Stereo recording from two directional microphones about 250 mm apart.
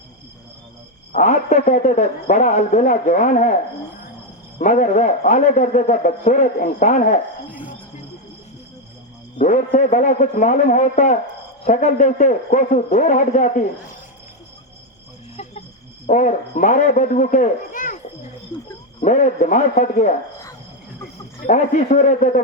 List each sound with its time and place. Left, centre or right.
1.1 s a man's voice: left
4.6 s a man's voice: left
9.4 s a man's voice: left
16.0 s a man's voice: left
21.4 s a man's voice: left